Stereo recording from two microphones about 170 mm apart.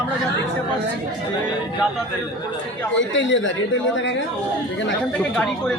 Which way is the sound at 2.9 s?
90° left.